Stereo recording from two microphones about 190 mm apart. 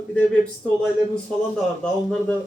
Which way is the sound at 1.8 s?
5° left (ahead or behind).